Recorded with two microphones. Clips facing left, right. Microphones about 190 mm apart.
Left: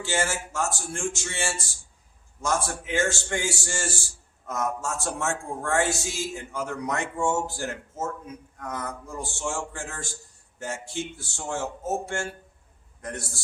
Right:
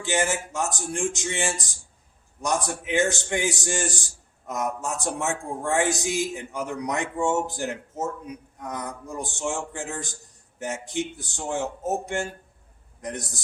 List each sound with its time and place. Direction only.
0.0 s a man's voice: 15° right (ahead or behind)